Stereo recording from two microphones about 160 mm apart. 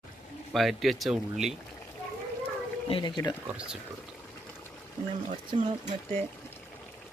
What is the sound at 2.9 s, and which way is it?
Speech, 30° left (ahead or behind).